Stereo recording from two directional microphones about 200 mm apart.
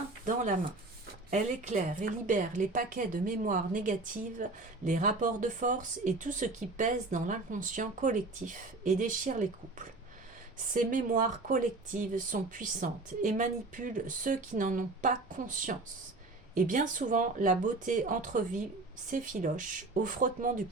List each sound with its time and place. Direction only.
0.3 s speech: 40° right (ahead or behind)